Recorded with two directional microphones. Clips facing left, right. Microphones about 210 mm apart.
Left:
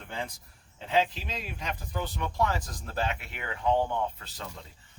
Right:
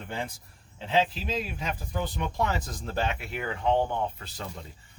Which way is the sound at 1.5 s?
10° right (ahead or behind).